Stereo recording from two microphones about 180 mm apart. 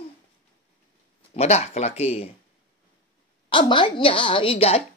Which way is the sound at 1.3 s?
35° left (ahead or behind).